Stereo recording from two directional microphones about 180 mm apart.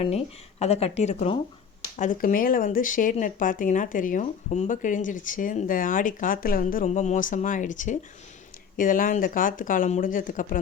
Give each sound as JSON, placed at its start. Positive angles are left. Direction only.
{"t": 0.6, "sound": "speech", "side_deg": 35}
{"t": 2.0, "sound": "speech", "side_deg": 50}